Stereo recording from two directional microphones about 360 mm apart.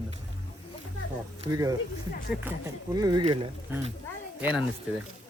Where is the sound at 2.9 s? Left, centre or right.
Centre.